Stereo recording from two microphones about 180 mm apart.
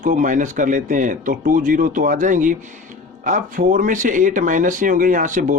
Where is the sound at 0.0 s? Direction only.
45° right (ahead or behind).